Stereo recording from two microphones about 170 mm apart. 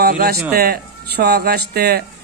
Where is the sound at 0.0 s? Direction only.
65° right (ahead or behind).